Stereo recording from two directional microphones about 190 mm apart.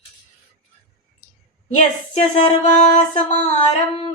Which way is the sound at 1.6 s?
35° left (ahead or behind).